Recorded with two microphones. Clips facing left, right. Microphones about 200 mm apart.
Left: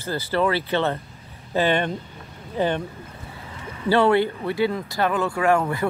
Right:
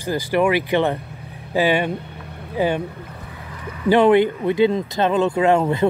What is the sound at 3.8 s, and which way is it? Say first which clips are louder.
Speech: right 4 dB; 15° right (ahead or behind).